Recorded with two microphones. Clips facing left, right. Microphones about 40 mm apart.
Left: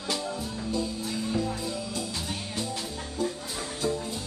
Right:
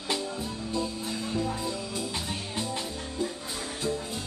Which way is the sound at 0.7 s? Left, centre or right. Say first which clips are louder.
Even; centre.